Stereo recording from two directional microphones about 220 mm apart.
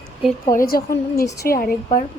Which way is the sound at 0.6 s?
40° left (ahead or behind).